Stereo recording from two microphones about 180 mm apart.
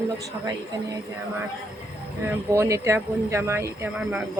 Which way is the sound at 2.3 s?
15° right (ahead or behind).